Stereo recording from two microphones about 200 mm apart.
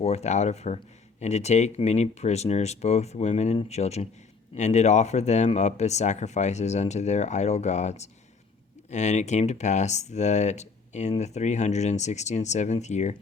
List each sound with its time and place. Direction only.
0.0 s speech: 30° left (ahead or behind)